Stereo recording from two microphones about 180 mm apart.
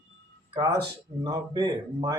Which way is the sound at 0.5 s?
20° right (ahead or behind).